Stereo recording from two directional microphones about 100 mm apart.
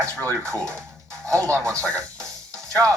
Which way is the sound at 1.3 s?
30° right (ahead or behind).